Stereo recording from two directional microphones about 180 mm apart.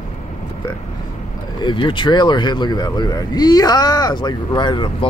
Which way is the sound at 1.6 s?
25° left (ahead or behind).